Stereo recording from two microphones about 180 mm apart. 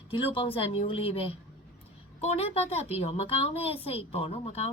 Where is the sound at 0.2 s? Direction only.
30° left (ahead or behind).